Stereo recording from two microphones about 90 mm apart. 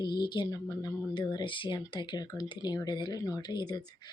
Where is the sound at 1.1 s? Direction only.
55° left (ahead or behind).